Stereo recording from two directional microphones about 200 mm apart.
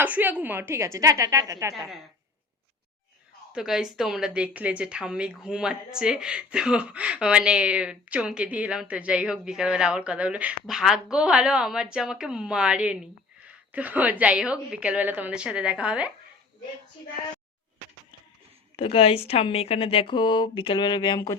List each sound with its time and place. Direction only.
0.0 s a woman's voice: 10° right (ahead or behind)
1.7 s a woman's voice: centre (ahead or behind)
3.5 s a woman's voice: 5° right (ahead or behind)
18.8 s a woman's voice: 30° left (ahead or behind)